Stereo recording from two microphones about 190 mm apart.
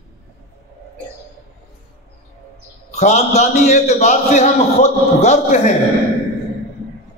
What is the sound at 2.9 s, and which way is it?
A man's voice, 35° left (ahead or behind).